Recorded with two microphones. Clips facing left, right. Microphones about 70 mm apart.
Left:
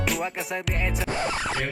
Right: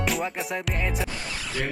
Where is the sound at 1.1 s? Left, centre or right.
Left.